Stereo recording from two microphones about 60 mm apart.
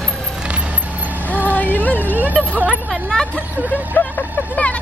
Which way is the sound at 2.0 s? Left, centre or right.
Right.